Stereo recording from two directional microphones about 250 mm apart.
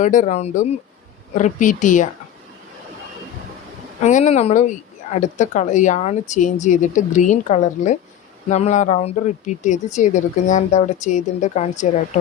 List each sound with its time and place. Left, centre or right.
0.0 s a woman's voice: left
4.0 s a woman's voice: left